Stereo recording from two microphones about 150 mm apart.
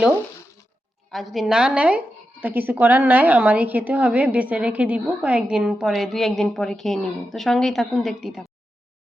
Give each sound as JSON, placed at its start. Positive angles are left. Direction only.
{"t": 1.1, "sound": "speech", "side_deg": 0}